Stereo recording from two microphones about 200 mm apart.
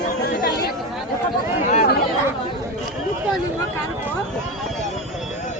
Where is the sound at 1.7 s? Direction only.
45° left (ahead or behind).